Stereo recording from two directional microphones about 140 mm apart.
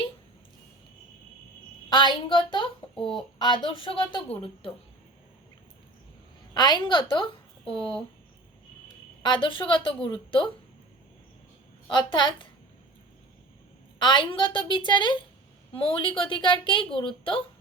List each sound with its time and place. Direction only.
1.9 s a woman's voice: 35° left (ahead or behind)
6.5 s a woman's voice: 30° left (ahead or behind)
9.2 s a woman's voice: 35° left (ahead or behind)
11.9 s a woman's voice: 35° left (ahead or behind)
14.0 s a woman's voice: 35° left (ahead or behind)